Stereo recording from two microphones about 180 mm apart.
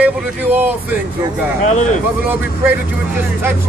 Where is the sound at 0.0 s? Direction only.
10° right (ahead or behind).